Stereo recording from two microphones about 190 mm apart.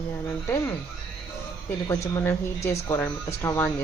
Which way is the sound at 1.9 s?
15° left (ahead or behind).